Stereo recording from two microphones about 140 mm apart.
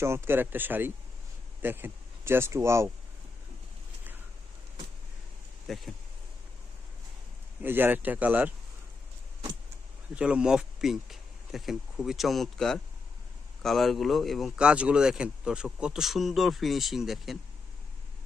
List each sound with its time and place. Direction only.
0.0 s speech: 20° right (ahead or behind)
5.6 s speech: centre (ahead or behind)
7.6 s speech: 15° right (ahead or behind)
10.2 s speech: 5° right (ahead or behind)